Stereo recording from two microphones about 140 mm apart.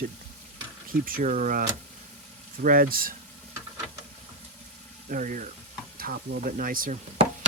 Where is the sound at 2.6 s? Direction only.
85° right.